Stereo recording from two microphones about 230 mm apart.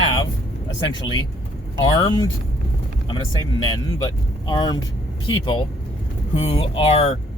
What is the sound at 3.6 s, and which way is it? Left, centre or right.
Speech, centre.